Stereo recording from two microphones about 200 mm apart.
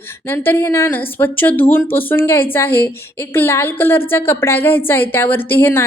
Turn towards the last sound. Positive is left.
turn(degrees=10)  # may be behind; listen again after turning